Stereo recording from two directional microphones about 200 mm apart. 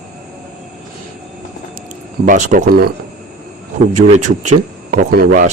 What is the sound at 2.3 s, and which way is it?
Speech, 40° right (ahead or behind).